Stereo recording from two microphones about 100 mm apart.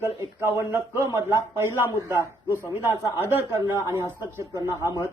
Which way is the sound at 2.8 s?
25° right (ahead or behind).